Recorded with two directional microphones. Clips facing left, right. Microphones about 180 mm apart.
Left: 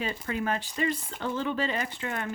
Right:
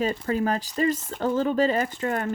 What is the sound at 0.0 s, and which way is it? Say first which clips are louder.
Speech: right 7 dB; 40° right (ahead or behind).